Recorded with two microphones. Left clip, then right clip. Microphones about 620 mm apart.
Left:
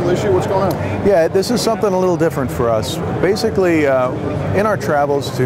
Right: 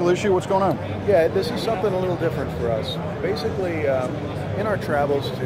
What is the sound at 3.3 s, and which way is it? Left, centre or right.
Speech, left.